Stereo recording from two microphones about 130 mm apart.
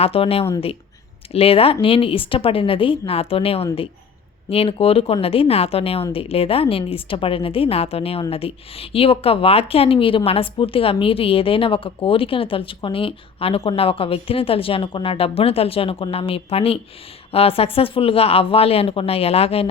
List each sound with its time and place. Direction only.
0.0 s a woman's voice: 50° left (ahead or behind)